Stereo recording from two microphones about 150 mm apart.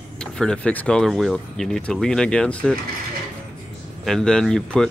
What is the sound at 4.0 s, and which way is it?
Speech, 5° left (ahead or behind).